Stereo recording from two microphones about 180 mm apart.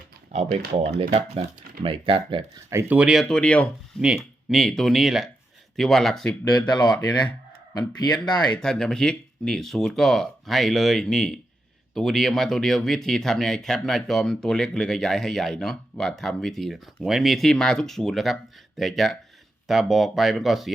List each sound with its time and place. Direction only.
0.3 s speech: 55° right (ahead or behind)
1.1 s speech: 35° right (ahead or behind)
2.6 s speech: 15° right (ahead or behind)
6.7 s speech: 25° left (ahead or behind)
8.5 s speech: 5° left (ahead or behind)